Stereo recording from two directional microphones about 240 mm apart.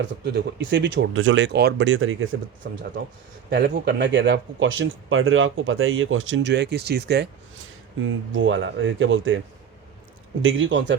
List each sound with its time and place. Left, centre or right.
0.0 s speech: right
2.6 s speech: right
8.0 s speech: right
10.4 s speech: right